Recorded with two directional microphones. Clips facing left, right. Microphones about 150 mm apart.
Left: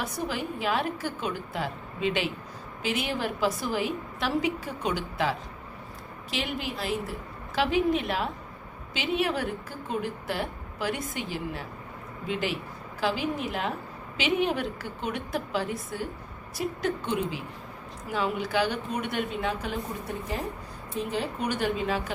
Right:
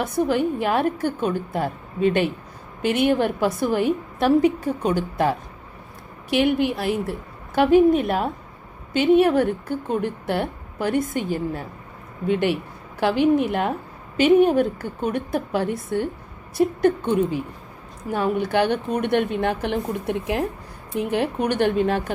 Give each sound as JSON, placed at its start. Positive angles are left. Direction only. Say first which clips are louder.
{"t": 0.0, "sound": "a woman's voice", "louder": "right 11 dB", "side_deg": -55}
{"t": 12.3, "sound": "a woman's voice", "louder": "right 9 dB", "side_deg": -60}
{"t": 20.9, "sound": "a woman's voice", "louder": "right 8 dB", "side_deg": -65}